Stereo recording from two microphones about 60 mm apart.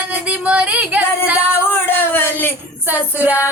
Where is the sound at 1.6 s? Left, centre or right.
Left.